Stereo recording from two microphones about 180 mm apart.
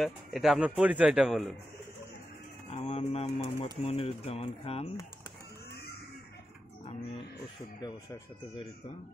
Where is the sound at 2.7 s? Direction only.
35° left (ahead or behind).